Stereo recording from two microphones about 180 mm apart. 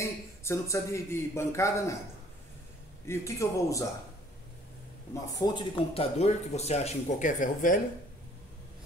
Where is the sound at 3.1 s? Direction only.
15° left (ahead or behind).